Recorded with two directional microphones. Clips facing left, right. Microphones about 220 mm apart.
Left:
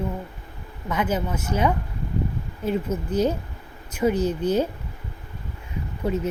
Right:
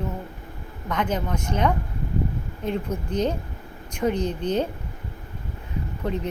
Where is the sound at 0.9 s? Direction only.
5° left (ahead or behind).